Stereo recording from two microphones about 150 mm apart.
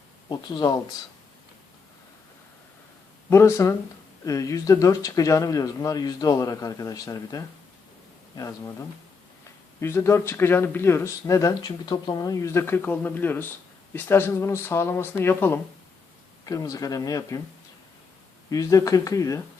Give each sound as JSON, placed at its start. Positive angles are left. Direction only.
{"t": 0.3, "sound": "speech", "side_deg": 25}
{"t": 3.2, "sound": "speech", "side_deg": 20}
{"t": 9.8, "sound": "speech", "side_deg": 15}
{"t": 18.5, "sound": "speech", "side_deg": 25}